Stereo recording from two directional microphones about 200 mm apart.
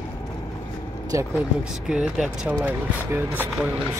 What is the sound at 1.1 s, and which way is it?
Speech, 15° right (ahead or behind).